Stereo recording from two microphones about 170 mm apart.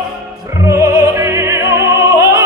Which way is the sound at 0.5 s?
15° right (ahead or behind).